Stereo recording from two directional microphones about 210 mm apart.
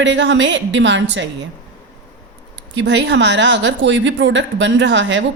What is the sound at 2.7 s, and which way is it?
A woman's voice, 60° right (ahead or behind).